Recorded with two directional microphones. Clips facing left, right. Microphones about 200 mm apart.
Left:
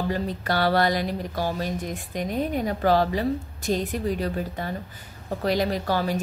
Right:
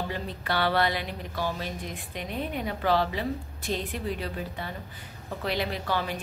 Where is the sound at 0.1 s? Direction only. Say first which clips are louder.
Left 5 dB; 40° left (ahead or behind).